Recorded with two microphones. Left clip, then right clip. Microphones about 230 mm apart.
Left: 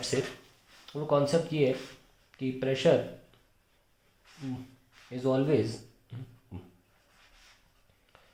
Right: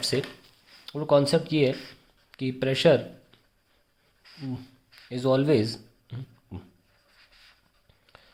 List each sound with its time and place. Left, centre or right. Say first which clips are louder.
0.1 s speech: right 2 dB; right
5.1 s speech: right 5 dB; right
8.1 s a sound: right 6 dB; right